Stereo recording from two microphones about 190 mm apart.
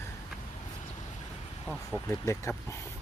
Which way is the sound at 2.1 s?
15° left (ahead or behind).